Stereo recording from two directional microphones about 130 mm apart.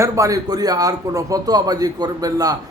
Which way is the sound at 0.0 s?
25° right (ahead or behind).